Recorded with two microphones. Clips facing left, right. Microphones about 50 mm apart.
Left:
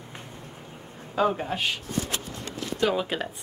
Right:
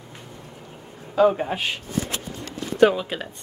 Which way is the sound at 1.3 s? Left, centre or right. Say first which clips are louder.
Right 3 dB; centre.